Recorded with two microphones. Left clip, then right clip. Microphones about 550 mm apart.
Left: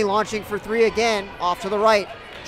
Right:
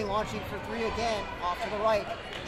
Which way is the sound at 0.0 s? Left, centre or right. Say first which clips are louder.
Left 10 dB; left.